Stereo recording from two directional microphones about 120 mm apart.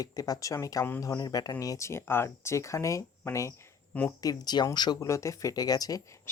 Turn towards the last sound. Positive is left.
turn(degrees=30)  # may be behind; listen again after turning